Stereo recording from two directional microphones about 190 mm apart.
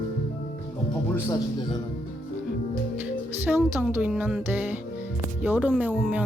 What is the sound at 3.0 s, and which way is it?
Music, 10° right (ahead or behind).